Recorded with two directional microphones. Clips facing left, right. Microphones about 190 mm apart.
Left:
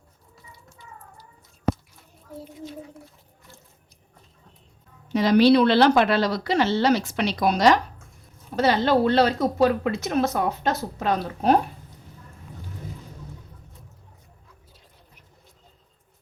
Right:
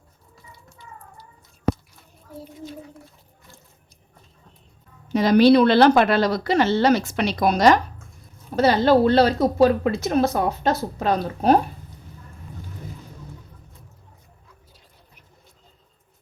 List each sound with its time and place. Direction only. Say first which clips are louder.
5.1 s a woman's voice: right 2 dB; 45° right (ahead or behind)